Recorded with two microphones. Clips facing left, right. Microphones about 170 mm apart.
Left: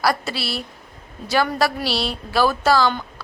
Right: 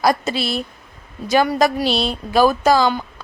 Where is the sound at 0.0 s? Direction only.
20° right (ahead or behind).